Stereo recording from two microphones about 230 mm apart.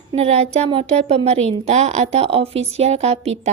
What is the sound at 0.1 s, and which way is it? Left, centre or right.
A woman's voice, right.